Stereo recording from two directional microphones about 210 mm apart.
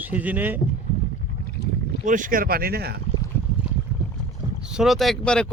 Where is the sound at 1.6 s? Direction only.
50° left (ahead or behind).